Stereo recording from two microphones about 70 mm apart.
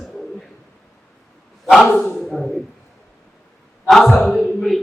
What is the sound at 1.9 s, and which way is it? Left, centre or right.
Speech, left.